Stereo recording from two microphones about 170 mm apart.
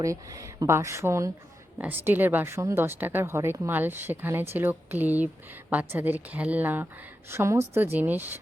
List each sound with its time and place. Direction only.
0.0 s a woman's voice: 20° right (ahead or behind)